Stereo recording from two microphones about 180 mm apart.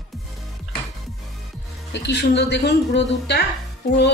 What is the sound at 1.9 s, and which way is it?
Speech, 70° left (ahead or behind).